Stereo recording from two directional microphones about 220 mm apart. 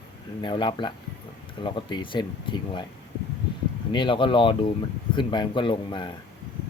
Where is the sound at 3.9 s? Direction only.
20° left (ahead or behind).